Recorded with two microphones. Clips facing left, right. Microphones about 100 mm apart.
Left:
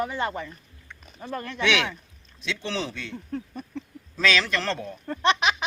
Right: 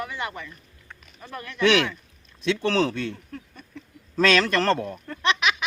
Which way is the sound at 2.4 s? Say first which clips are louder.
Right 8 dB; 50° right (ahead or behind).